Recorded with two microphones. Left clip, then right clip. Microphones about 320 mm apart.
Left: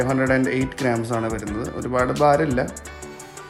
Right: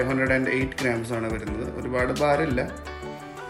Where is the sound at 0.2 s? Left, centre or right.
Left.